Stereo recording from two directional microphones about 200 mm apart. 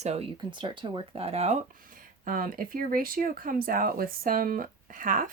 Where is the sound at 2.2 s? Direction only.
45° right (ahead or behind).